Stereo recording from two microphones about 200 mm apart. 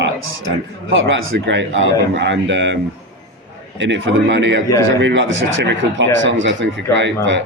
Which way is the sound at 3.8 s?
65° right (ahead or behind).